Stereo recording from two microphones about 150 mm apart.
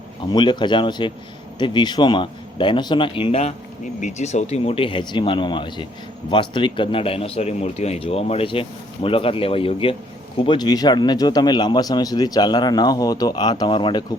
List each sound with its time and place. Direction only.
0.3 s speech: 30° left (ahead or behind)
4.0 s a man's voice: 50° left (ahead or behind); by 14.0 s 35° left (ahead or behind)